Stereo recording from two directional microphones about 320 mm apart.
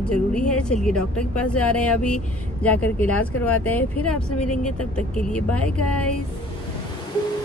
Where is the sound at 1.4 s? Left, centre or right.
Left.